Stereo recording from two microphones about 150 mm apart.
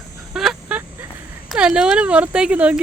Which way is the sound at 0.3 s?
5° right (ahead or behind).